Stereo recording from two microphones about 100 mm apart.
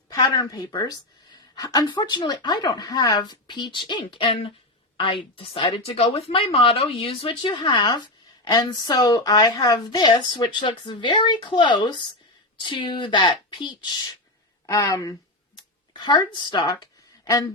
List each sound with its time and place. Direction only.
0.1 s a woman's voice: 45° left (ahead or behind)
14.7 s speech: 35° left (ahead or behind)
15.9 s a woman's voice: 45° left (ahead or behind)
17.2 s speech: 30° left (ahead or behind)